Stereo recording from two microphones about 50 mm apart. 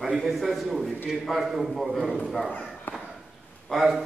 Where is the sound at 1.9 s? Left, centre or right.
Centre.